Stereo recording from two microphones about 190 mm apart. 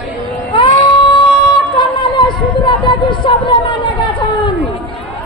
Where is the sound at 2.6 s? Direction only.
25° left (ahead or behind).